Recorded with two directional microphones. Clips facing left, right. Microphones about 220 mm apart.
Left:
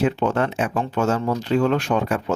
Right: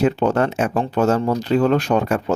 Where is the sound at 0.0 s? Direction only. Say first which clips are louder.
Right 3 dB; 40° right (ahead or behind).